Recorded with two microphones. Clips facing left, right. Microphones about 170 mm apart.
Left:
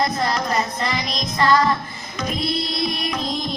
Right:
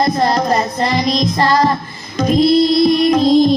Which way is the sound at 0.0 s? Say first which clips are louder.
Right 7 dB; 35° right (ahead or behind).